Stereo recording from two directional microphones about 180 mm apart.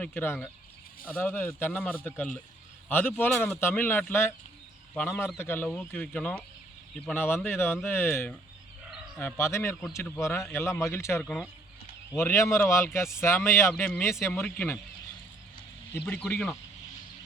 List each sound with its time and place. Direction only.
0.0 s speech: 10° left (ahead or behind)
16.0 s speech: 10° left (ahead or behind)